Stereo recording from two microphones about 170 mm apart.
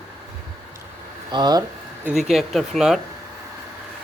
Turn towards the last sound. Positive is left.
turn(degrees=0)  # may be behind; listen again after turning